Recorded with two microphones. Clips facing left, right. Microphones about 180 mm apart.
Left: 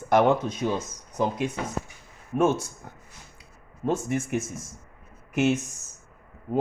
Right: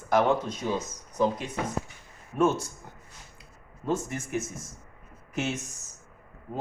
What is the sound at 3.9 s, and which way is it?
Speech, 60° left (ahead or behind).